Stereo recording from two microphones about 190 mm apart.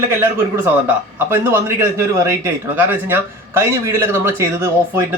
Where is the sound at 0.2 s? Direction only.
10° right (ahead or behind).